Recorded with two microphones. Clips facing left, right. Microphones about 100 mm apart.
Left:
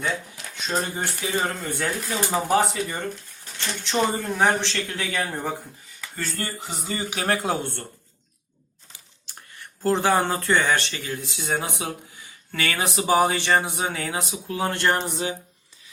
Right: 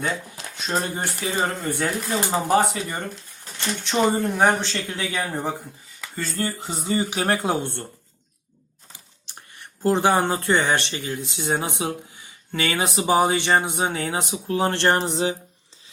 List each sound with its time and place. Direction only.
0.3 s speech: 20° right (ahead or behind)
6.6 s speech: 30° right (ahead or behind)
9.2 s speech: 20° right (ahead or behind)